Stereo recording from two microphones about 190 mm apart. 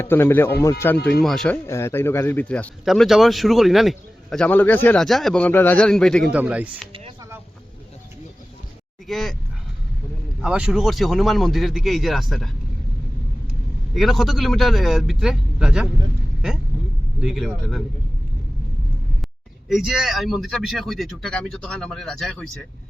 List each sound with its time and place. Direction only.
0.0 s speech: 10° left (ahead or behind)
1.2 s a man's voice: centre (ahead or behind)
1.6 s a man's voice: 15° left (ahead or behind)
6.3 s speech: 5° right (ahead or behind)
9.0 s a man's voice: centre (ahead or behind)
10.4 s a man's voice: 5° right (ahead or behind)
13.9 s a man's voice: centre (ahead or behind)
17.2 s a man's voice: centre (ahead or behind)
19.6 s a man's voice: centre (ahead or behind)